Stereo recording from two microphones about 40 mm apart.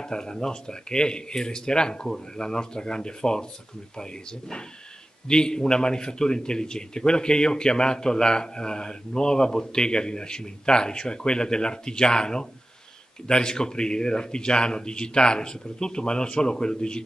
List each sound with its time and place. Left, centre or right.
0.0 s a man's voice: centre